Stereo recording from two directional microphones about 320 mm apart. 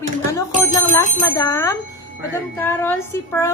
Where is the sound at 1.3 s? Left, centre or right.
Centre.